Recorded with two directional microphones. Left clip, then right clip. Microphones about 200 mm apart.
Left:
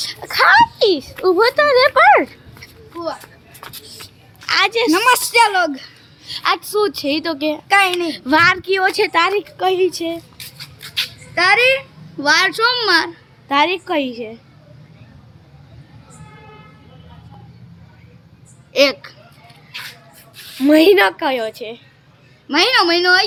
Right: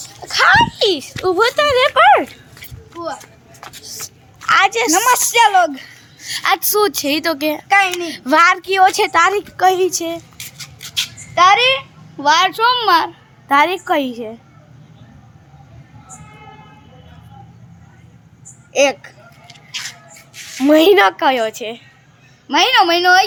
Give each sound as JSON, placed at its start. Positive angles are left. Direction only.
{"t": 0.2, "sound": "speech", "side_deg": 10}
{"t": 4.4, "sound": "a woman's voice", "side_deg": -5}
{"t": 4.9, "sound": "speech", "side_deg": 20}
{"t": 6.2, "sound": "speech", "side_deg": -15}
{"t": 7.7, "sound": "a child's voice", "side_deg": 30}
{"t": 8.1, "sound": "speech", "side_deg": -5}
{"t": 10.6, "sound": "a sound", "side_deg": -15}
{"t": 11.3, "sound": "a child's voice", "side_deg": 10}
{"t": 13.5, "sound": "speech", "side_deg": -15}
{"t": 20.3, "sound": "a woman's voice", "side_deg": -10}
{"t": 22.4, "sound": "speech", "side_deg": 5}